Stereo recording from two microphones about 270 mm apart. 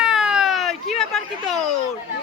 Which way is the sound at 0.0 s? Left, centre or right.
Centre.